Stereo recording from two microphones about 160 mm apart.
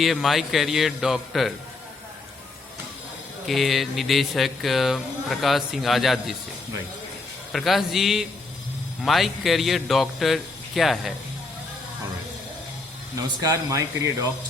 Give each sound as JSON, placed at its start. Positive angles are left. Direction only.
{"t": 0.0, "sound": "speech", "side_deg": 0}
{"t": 3.4, "sound": "speech", "side_deg": 0}
{"t": 7.5, "sound": "speech", "side_deg": 0}
{"t": 13.1, "sound": "speech", "side_deg": -25}